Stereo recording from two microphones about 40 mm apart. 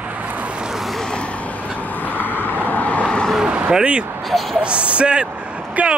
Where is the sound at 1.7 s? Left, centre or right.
Left.